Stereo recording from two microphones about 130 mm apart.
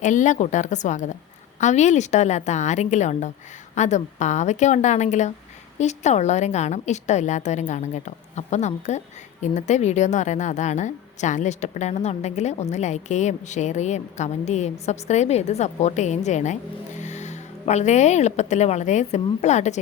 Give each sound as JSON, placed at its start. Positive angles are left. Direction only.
{"t": 0.0, "sound": "a woman's voice", "side_deg": 70}